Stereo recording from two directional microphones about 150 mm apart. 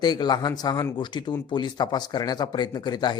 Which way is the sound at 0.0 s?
25° left (ahead or behind).